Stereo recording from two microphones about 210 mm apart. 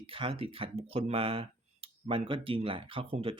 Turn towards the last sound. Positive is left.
turn(degrees=-25)  # may be behind; listen again after turning